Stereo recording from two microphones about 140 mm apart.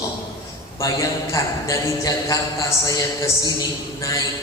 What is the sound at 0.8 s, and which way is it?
A man's voice, 25° left (ahead or behind).